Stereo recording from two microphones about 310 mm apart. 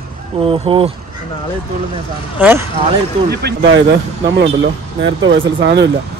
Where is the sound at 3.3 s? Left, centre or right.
Right.